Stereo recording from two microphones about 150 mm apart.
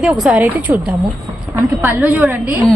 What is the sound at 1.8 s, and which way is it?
Speech, 10° right (ahead or behind).